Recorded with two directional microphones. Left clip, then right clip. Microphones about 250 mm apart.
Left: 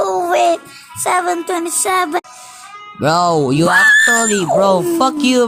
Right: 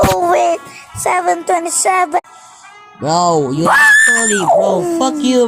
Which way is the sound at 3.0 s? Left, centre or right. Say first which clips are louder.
Even; left.